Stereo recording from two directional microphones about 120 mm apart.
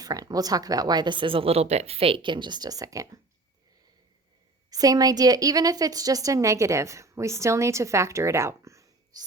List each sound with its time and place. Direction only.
0.0 s speech: 30° right (ahead or behind)
4.7 s a woman's voice: 30° right (ahead or behind)